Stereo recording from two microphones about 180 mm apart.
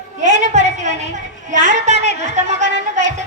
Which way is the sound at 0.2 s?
45° right (ahead or behind).